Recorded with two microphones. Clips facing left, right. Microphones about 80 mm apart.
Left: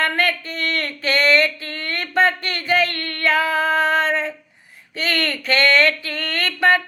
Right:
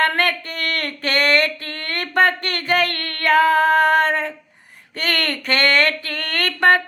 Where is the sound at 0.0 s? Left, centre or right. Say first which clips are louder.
Right 1 dB; right.